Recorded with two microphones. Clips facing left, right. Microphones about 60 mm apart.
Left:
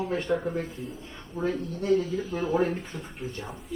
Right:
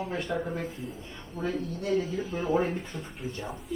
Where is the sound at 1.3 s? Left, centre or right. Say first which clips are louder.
Left 2 dB; left.